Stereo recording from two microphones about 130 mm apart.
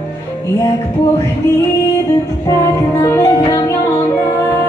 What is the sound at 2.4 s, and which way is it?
Music, 25° left (ahead or behind).